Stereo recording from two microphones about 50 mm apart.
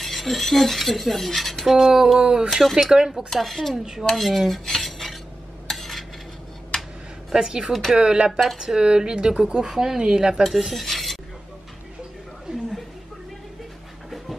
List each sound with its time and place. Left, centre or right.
0.0 s speech: centre
2.1 s speech: centre
2.5 s speech: centre
4.0 s cutlery: centre
7.3 s speech: centre
8.3 s speech: centre
10.4 s speech: centre